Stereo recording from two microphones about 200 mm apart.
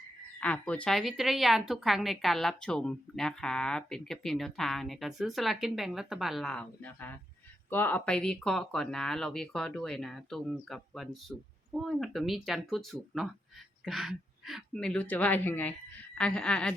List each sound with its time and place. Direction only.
0.3 s a woman's voice: 5° left (ahead or behind)